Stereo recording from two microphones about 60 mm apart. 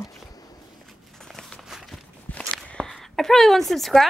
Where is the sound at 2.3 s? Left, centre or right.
Centre.